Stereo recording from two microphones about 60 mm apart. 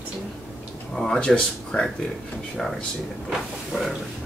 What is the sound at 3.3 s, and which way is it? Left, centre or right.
Speech, centre.